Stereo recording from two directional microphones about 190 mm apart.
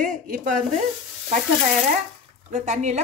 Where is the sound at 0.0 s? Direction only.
45° right (ahead or behind).